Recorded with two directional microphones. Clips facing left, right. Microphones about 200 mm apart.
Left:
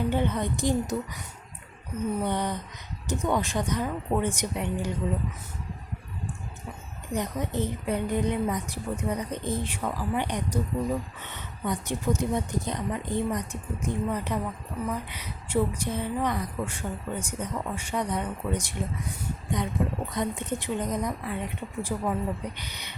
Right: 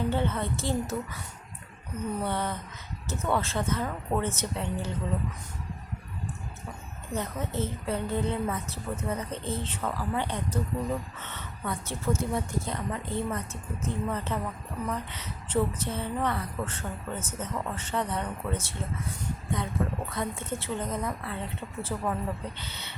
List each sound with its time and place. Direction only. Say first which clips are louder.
0.1 s a woman's voice: left 2 dB; 15° left (ahead or behind)
2.2 s a woman's voice: left 2 dB; 15° left (ahead or behind)
7.1 s a woman's voice: left 3 dB; 15° left (ahead or behind)
20.1 s a woman's voice: left 3 dB; 15° left (ahead or behind)